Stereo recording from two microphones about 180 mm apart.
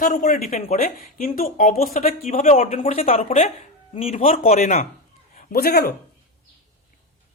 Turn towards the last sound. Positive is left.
turn(degrees=60)  # may be behind; listen again after turning